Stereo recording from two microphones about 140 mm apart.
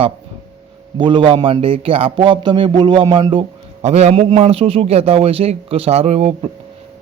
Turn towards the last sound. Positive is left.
turn(degrees=-45)  # may be behind; listen again after turning